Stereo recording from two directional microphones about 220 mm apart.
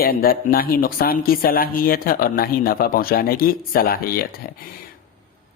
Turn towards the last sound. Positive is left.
turn(degrees=40)  # may be behind; listen again after turning